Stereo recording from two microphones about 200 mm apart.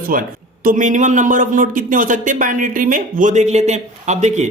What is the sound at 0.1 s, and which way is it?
A man's voice, 45° right (ahead or behind).